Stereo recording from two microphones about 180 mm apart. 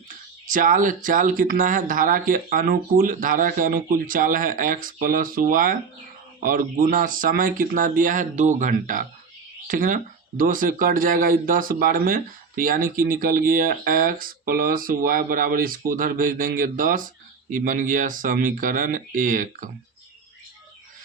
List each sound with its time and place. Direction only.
0.4 s speech: 50° right (ahead or behind)